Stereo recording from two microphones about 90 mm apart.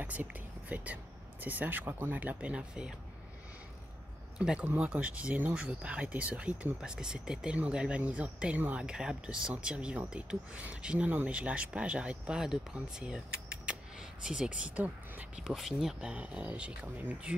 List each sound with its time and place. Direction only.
0.0 s speech: 20° right (ahead or behind)
4.4 s speech: 15° right (ahead or behind)
15.4 s speech: 5° right (ahead or behind)